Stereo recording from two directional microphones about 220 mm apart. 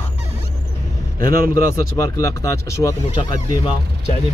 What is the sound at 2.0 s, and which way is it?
Speech, 15° left (ahead or behind).